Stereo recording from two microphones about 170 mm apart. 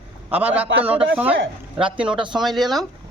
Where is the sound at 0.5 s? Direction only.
10° right (ahead or behind).